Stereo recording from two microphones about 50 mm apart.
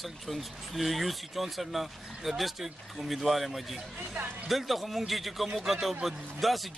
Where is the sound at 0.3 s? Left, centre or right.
Centre.